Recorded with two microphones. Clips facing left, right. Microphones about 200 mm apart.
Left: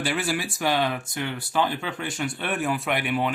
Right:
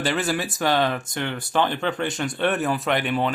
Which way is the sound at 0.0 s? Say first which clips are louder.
Right 3 dB; 10° left (ahead or behind).